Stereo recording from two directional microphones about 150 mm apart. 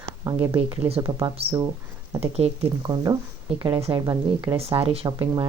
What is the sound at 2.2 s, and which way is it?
Speech, 40° right (ahead or behind).